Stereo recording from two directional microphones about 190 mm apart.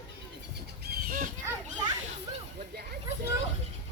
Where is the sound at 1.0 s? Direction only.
45° right (ahead or behind).